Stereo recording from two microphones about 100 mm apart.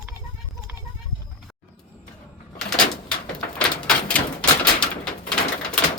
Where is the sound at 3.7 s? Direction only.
10° left (ahead or behind).